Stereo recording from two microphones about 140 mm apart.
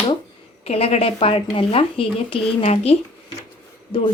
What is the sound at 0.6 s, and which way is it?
Speech, 45° left (ahead or behind).